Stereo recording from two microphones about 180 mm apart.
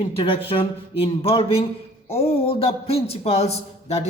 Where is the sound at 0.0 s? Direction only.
30° left (ahead or behind).